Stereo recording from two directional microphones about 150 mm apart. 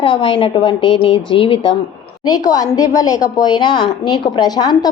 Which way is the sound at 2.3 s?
25° left (ahead or behind).